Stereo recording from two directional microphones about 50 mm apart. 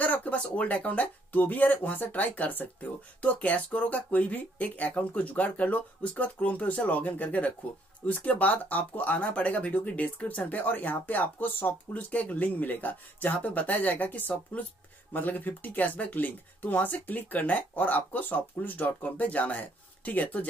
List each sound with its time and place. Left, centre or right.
0.0 s speech: left
11.9 s speech: left